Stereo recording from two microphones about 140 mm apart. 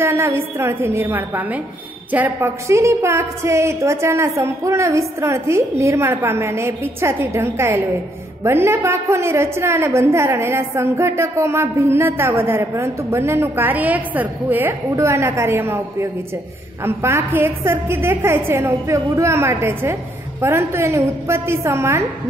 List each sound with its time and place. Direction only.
0.0 s a woman's voice: 15° right (ahead or behind)